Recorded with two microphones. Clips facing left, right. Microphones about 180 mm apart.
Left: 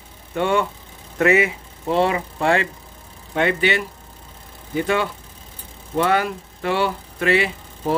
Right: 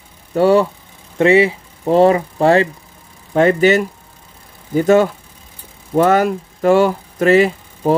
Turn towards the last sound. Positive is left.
turn(degrees=-40)  # may be behind; listen again after turning